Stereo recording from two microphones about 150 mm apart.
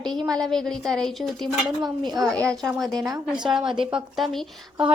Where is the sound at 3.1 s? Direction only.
20° right (ahead or behind).